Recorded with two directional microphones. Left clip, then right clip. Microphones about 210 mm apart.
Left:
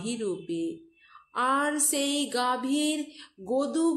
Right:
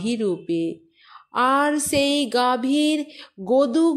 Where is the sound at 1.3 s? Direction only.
35° right (ahead or behind).